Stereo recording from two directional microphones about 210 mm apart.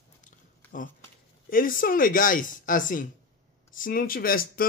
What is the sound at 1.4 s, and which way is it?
Speech, 40° left (ahead or behind).